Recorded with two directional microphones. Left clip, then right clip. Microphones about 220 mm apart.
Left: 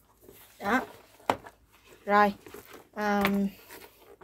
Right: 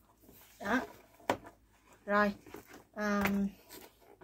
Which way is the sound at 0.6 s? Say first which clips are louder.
Left 6 dB; 50° left (ahead or behind).